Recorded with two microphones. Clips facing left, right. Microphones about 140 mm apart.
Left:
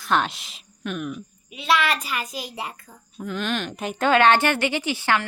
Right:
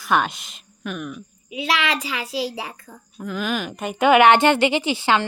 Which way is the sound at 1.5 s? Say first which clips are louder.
Left 1 dB; 90° right.